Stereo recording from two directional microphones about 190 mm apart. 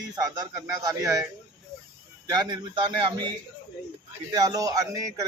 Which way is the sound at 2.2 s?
20° right (ahead or behind).